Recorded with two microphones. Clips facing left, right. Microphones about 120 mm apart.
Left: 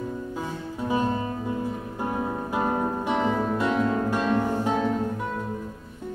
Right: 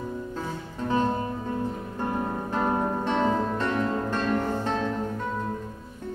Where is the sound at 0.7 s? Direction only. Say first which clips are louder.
Even; 10° left (ahead or behind).